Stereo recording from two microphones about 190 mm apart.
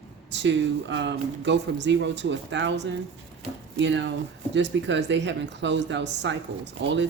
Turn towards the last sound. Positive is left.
turn(degrees=-70)  # may be behind; listen again after turning